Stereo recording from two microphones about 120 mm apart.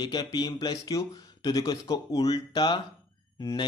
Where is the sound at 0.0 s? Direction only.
35° left (ahead or behind).